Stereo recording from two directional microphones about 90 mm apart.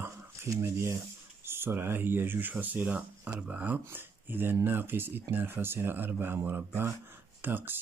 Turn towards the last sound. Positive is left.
turn(degrees=-20)  # may be behind; listen again after turning